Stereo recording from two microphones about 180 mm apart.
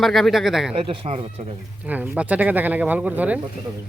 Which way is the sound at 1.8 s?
10° right (ahead or behind).